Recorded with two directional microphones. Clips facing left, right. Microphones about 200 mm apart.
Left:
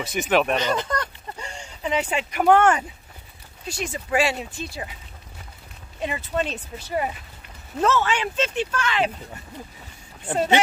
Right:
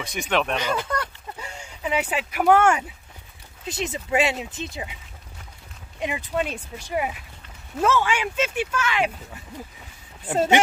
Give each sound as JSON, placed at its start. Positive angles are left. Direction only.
{"t": 0.0, "sound": "speech", "side_deg": 5}
{"t": 0.6, "sound": "speech", "side_deg": -10}
{"t": 3.6, "sound": "speech", "side_deg": -20}
{"t": 5.9, "sound": "speech", "side_deg": -15}